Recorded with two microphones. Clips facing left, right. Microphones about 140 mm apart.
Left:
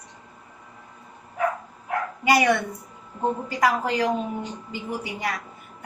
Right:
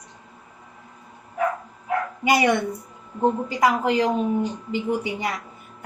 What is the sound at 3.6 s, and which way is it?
A woman's voice, 20° right (ahead or behind).